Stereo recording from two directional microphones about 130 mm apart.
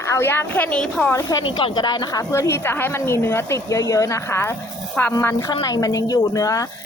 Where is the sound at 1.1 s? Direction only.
25° left (ahead or behind).